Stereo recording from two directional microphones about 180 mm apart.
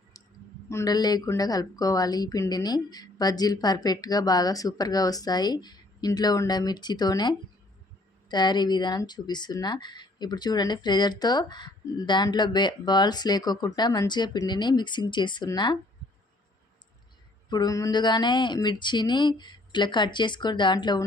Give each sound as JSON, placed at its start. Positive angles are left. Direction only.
{"t": 0.1, "sound": "clicking", "side_deg": 20}
{"t": 0.7, "sound": "speech", "side_deg": 20}
{"t": 17.5, "sound": "speech", "side_deg": 20}